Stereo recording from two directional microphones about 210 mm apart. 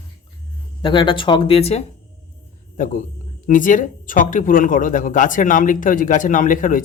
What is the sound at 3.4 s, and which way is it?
Speech, 40° left (ahead or behind).